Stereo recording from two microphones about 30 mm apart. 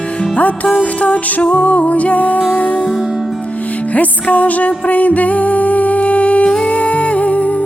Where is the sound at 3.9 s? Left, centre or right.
Left.